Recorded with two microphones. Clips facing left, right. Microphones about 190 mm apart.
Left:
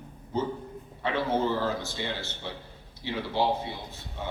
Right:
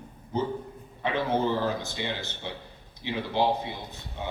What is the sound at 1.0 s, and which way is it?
A man's voice, 15° right (ahead or behind).